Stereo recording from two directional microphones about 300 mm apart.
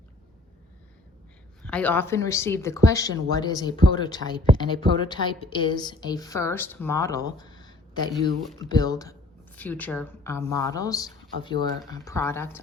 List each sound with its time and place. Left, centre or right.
1.6 s speech: centre
7.3 s a sound: centre
8.5 s speech: centre